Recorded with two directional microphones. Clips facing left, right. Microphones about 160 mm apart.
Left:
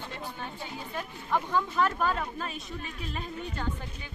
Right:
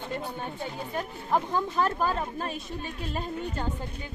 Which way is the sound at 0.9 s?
35° right (ahead or behind).